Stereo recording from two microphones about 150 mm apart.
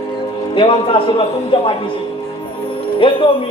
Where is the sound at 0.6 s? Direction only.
35° left (ahead or behind).